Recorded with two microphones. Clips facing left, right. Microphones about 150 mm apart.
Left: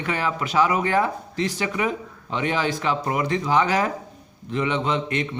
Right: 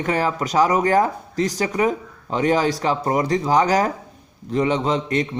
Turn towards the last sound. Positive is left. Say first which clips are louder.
# right 3 dB
turn(degrees=-35)  # may be behind; listen again after turning